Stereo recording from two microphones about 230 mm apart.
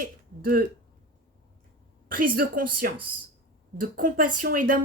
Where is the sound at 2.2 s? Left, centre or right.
Right.